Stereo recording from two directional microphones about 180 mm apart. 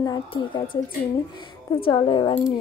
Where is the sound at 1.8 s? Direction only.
25° left (ahead or behind).